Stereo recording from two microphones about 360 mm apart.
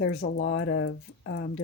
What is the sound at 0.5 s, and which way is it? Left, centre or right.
Speech, left.